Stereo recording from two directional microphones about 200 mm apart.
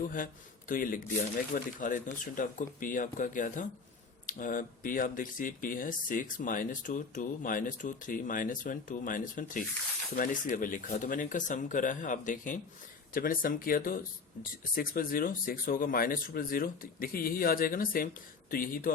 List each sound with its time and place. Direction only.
0.7 s speech: 45° left (ahead or behind)